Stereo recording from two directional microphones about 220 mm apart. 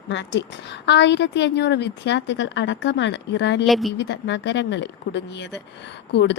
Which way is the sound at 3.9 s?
55° left (ahead or behind).